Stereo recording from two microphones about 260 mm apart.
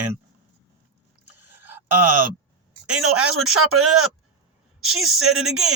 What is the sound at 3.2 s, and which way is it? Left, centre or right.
Speech, right.